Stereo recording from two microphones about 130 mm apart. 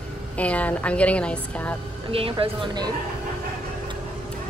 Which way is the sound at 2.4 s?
35° right (ahead or behind).